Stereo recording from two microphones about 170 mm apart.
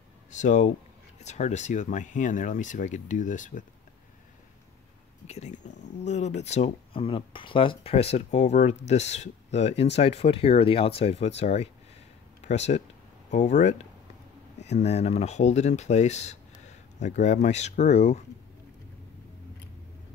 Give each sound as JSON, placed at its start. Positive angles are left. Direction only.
{"t": 0.3, "sound": "speech", "side_deg": 45}
{"t": 5.2, "sound": "speech", "side_deg": 40}